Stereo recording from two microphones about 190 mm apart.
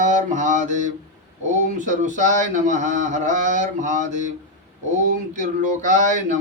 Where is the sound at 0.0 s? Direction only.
40° right (ahead or behind).